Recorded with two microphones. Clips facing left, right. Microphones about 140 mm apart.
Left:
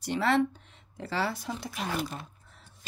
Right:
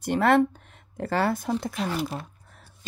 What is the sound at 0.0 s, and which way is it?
Speech, 50° right (ahead or behind).